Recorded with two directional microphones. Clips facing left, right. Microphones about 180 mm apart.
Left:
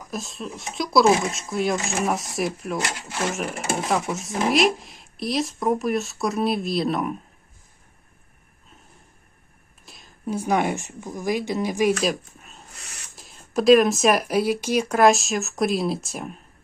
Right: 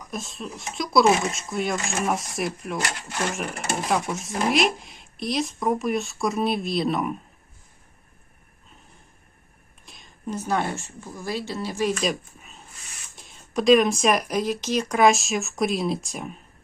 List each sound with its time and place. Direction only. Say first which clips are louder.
0.0 s speech: left 2 dB; centre (ahead or behind)
9.8 s a woman's voice: left 2 dB; centre (ahead or behind)
12.0 s speech: left 2 dB; centre (ahead or behind)